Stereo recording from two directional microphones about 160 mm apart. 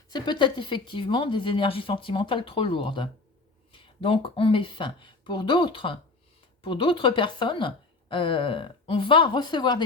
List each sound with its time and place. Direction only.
0.1 s speech: 30° left (ahead or behind)